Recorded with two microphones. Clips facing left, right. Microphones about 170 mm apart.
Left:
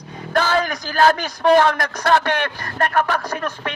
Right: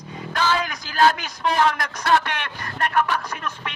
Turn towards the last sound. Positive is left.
turn(degrees=45)  # may be behind; listen again after turning